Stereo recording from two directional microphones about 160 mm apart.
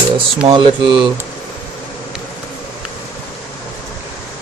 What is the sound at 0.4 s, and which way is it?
Speech, 30° right (ahead or behind).